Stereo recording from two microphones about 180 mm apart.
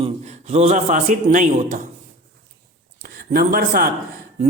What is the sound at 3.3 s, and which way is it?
Speech, 55° right (ahead or behind).